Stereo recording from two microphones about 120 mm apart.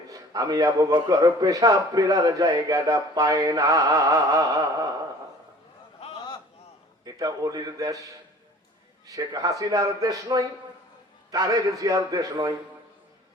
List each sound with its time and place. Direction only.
0.1 s a man's voice: 30° right (ahead or behind)
6.0 s a sound: 45° left (ahead or behind)
7.0 s a man's voice: 30° right (ahead or behind)
9.0 s a man's voice: 30° right (ahead or behind)